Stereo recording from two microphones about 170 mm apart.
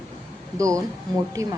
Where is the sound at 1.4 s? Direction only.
20° right (ahead or behind).